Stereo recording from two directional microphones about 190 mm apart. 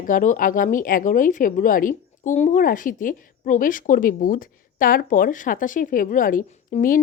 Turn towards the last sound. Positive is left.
turn(degrees=40)  # may be behind; listen again after turning